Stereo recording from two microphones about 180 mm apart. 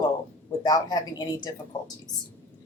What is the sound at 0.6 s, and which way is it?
Speech, 20° left (ahead or behind).